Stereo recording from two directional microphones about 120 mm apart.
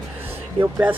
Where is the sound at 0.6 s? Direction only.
20° right (ahead or behind).